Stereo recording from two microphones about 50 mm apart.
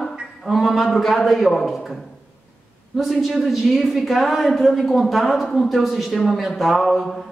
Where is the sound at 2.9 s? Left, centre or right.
Centre.